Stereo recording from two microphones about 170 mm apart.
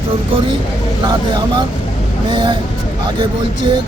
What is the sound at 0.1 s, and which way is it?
Speech, 30° right (ahead or behind).